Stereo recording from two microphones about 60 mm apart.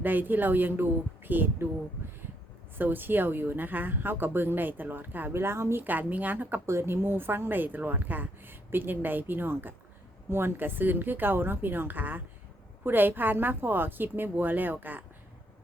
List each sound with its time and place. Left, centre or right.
0.0 s speech: right
2.7 s speech: right
5.8 s speech: right
6.7 s speech: right